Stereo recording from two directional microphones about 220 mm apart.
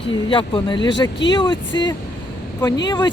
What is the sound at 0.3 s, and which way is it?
Speech, 20° left (ahead or behind).